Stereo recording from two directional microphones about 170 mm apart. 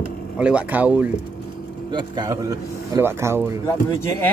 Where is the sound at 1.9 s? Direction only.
25° right (ahead or behind).